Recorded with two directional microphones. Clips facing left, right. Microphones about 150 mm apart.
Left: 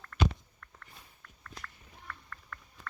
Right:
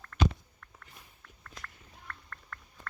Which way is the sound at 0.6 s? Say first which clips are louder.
Even; centre (ahead or behind).